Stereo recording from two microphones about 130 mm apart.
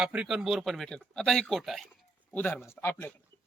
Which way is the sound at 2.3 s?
15° left (ahead or behind).